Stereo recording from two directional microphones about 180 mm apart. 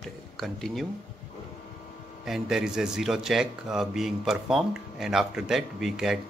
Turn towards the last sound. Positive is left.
turn(degrees=0)  # may be behind; listen again after turning